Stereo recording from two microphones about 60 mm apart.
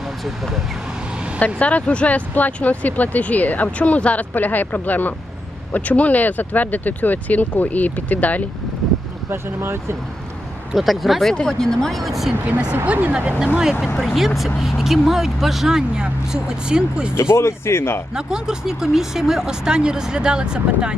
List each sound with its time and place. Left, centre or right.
0.3 s speech: centre
1.4 s speech: left
9.3 s speech: right
10.8 s speech: centre
12.5 s speech: right
13.1 s speech: centre
17.2 s speech: left
18.1 s speech: centre